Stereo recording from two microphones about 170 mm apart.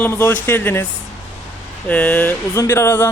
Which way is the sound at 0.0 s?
10° left (ahead or behind).